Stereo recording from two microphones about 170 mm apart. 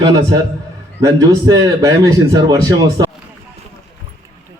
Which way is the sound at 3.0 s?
25° right (ahead or behind).